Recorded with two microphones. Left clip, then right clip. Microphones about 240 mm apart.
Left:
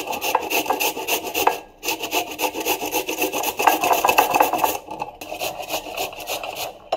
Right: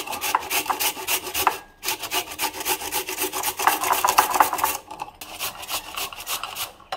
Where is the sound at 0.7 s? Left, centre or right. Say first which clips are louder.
Left 3 dB; right.